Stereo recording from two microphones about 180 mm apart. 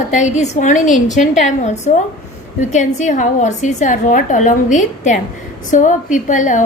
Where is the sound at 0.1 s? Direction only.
40° left (ahead or behind).